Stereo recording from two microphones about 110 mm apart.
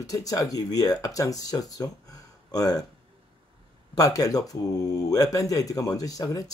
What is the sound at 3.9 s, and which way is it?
Speech, 30° left (ahead or behind).